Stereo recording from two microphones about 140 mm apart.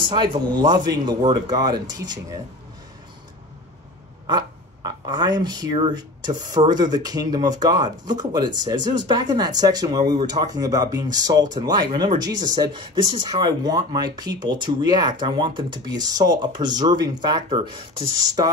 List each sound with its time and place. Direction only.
0.1 s speech: 30° right (ahead or behind)
4.3 s speech: 30° right (ahead or behind)